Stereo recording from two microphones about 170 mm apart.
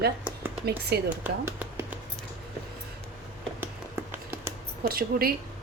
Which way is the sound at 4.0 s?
15° right (ahead or behind).